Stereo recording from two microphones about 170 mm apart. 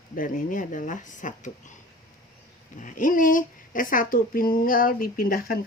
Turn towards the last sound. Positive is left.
turn(degrees=60)  # may be behind; listen again after turning